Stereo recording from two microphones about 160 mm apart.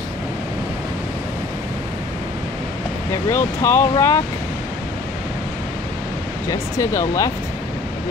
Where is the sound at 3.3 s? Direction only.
15° left (ahead or behind).